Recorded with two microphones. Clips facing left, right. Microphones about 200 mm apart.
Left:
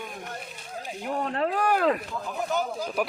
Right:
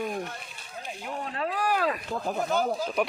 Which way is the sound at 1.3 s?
55° left (ahead or behind).